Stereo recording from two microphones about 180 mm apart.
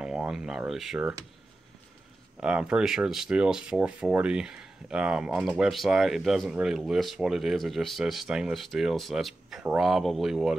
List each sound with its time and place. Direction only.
0.0 s speech: 5° right (ahead or behind)
2.4 s speech: 5° right (ahead or behind)